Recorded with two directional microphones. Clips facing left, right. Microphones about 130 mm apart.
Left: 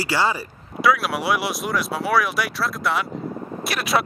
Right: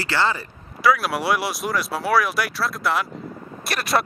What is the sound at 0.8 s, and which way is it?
Speech, centre (ahead or behind).